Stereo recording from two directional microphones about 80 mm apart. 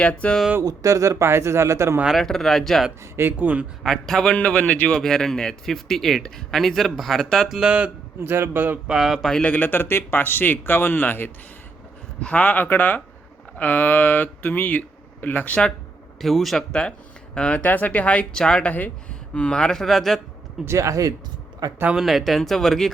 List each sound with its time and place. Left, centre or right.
0.0 s speech: centre
0.6 s speech: right
2.1 s speech: centre
3.2 s speech: right
3.8 s speech: centre
4.4 s speech: centre
8.2 s speech: right
8.9 s speech: centre
9.3 s speech: centre
16.2 s speech: centre
17.3 s speech: centre
20.7 s speech: right
21.9 s speech: centre